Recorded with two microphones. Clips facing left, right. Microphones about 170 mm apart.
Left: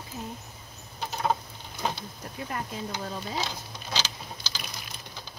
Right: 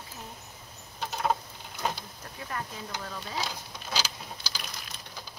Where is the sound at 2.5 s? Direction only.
20° left (ahead or behind).